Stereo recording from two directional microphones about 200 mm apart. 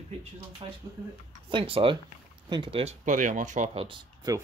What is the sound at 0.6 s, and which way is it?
Speech, 25° right (ahead or behind).